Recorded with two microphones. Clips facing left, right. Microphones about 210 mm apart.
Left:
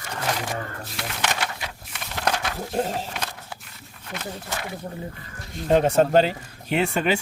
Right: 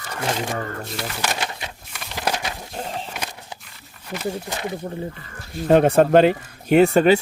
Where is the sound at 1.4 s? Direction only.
20° right (ahead or behind).